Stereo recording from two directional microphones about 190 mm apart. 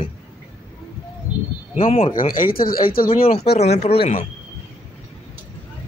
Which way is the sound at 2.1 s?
45° left (ahead or behind).